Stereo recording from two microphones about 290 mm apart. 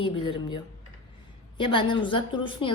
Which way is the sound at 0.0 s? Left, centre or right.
Centre.